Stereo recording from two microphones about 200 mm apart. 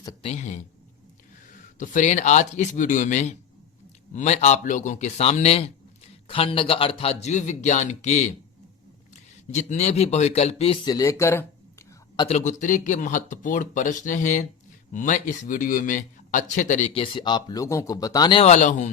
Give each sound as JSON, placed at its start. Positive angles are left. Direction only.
{"t": 0.0, "sound": "a sound", "side_deg": 30}
{"t": 1.6, "sound": "speech", "side_deg": 40}
{"t": 9.5, "sound": "speech", "side_deg": 35}
{"t": 12.4, "sound": "speech", "side_deg": 40}